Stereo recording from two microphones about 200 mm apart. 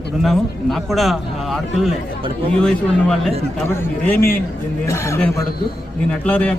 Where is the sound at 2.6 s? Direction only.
5° left (ahead or behind).